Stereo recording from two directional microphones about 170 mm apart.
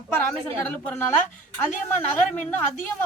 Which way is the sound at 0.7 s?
10° left (ahead or behind).